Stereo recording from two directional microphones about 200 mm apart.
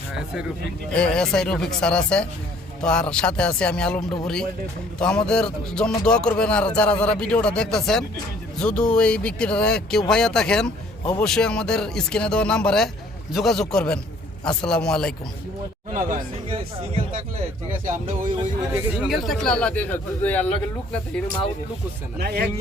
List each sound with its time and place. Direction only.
0.9 s speech: 5° left (ahead or behind)
15.9 s speech: 40° right (ahead or behind)
16.5 s speech: 30° right (ahead or behind)
17.9 s speech: 40° right (ahead or behind)
19.0 s speech: centre (ahead or behind)
22.2 s speech: 50° right (ahead or behind)